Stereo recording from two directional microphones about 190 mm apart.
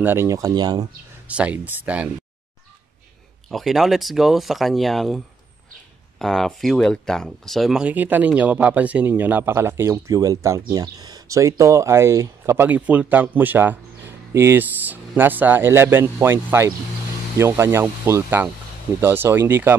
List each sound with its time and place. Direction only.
0.0 s speech: 15° right (ahead or behind)
1.2 s speech: 5° right (ahead or behind)
3.4 s speech: centre (ahead or behind)